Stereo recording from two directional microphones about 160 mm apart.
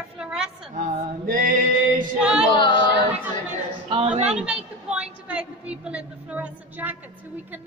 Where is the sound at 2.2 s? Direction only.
5° right (ahead or behind).